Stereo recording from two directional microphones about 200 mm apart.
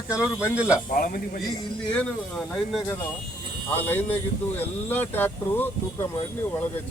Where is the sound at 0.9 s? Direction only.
45° left (ahead or behind).